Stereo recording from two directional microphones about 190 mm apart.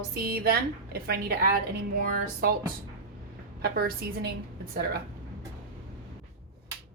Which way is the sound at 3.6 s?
55° right (ahead or behind).